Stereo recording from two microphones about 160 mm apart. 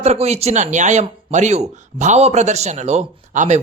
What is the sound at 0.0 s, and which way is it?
Speech, 45° right (ahead or behind).